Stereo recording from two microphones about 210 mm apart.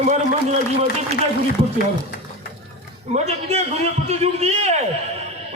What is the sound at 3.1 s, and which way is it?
A man's voice, 30° right (ahead or behind).